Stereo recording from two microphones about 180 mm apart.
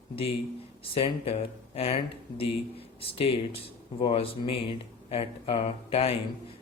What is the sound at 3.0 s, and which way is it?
A man's voice, 30° left (ahead or behind).